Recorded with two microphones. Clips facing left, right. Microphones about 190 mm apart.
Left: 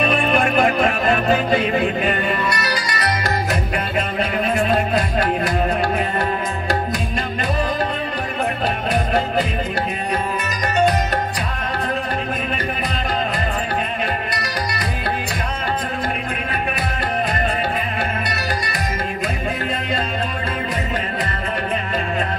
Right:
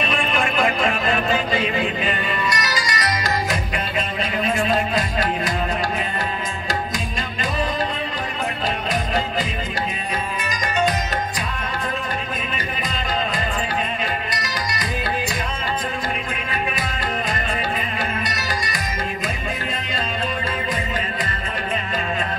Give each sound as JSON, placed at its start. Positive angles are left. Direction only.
{"t": 0.0, "sound": "music", "side_deg": 60}
{"t": 14.3, "sound": "music", "side_deg": 60}